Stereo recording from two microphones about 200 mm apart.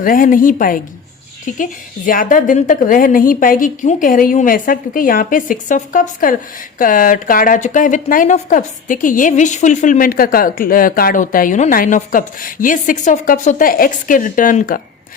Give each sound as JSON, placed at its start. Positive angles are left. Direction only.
{"t": 0.0, "sound": "speech", "side_deg": 45}